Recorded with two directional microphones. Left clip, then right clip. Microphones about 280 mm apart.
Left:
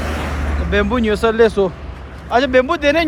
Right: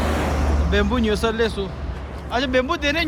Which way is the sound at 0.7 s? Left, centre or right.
Centre.